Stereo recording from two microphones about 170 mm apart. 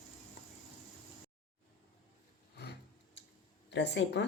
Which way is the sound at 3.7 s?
90° left.